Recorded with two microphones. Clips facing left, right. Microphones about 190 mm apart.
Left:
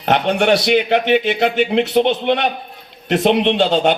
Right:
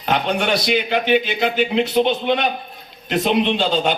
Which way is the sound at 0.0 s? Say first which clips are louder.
Left 4 dB; 65° left (ahead or behind).